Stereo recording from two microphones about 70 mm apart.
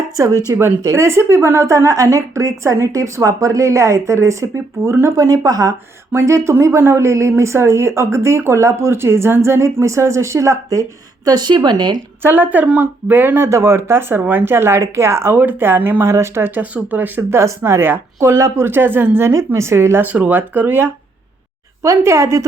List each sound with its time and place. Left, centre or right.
0.2 s speech: right
5.1 s speech: right
6.1 s speech: right
11.3 s speech: right
12.2 s speech: right
13.4 s speech: right
15.4 s speech: right
16.0 s speech: right
17.3 s speech: right
20.1 s speech: right
21.8 s speech: right